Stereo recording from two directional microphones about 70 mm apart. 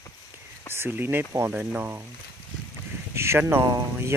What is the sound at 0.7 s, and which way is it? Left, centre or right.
Speech, right.